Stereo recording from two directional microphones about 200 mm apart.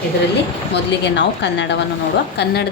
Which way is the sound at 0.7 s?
60° left (ahead or behind).